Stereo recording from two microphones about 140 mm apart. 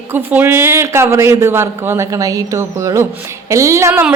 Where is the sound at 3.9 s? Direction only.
10° right (ahead or behind).